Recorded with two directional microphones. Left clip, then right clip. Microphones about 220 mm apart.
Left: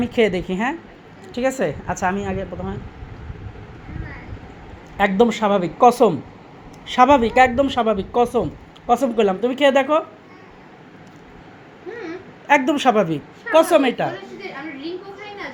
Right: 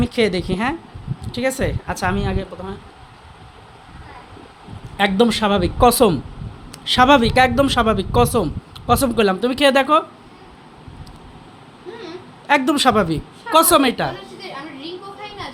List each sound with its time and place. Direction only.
0.0 s a woman's voice: 10° right (ahead or behind)
4.9 s a man's voice: 15° right (ahead or behind)
6.9 s a man's voice: 20° right (ahead or behind)
12.5 s a woman's voice: 15° right (ahead or behind)